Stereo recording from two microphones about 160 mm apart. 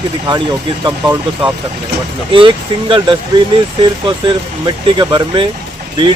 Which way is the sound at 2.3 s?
30° right (ahead or behind).